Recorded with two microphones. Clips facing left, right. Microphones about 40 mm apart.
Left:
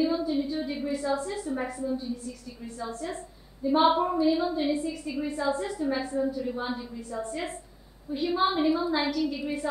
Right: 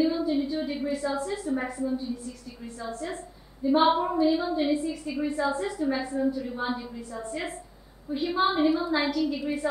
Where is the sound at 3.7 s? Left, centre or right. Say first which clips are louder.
Even; centre.